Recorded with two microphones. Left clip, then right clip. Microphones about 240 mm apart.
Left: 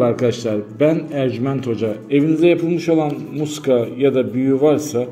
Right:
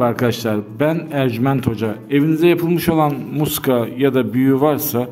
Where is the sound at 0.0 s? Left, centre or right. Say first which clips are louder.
Left 1 dB; right.